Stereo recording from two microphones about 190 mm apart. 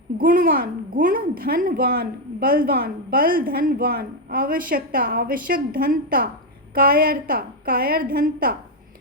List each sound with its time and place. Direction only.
0.2 s a child's voice: 45° right (ahead or behind)